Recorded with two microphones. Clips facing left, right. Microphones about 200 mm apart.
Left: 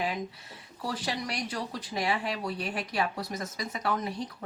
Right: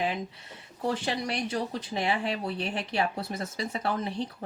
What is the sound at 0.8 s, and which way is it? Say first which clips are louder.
Speech: right 4 dB; 25° right (ahead or behind).